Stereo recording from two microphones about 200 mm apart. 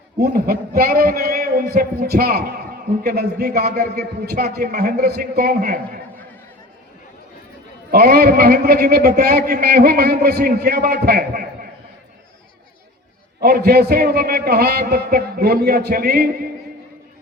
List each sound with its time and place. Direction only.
0.2 s a man's voice: 50° right (ahead or behind)
7.9 s a man's voice: 50° right (ahead or behind)
13.4 s a man's voice: 50° right (ahead or behind)